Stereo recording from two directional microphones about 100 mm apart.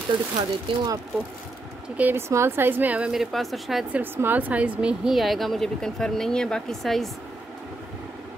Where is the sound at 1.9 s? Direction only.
15° right (ahead or behind).